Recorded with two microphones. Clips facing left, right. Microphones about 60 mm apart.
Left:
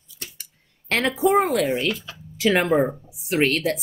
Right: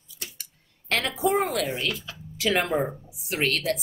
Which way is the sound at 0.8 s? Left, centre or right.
Left.